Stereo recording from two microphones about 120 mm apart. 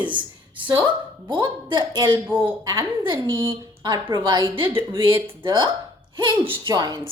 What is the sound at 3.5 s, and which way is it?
A woman's voice, 40° right (ahead or behind).